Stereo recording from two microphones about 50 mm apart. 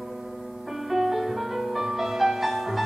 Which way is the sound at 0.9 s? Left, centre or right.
Centre.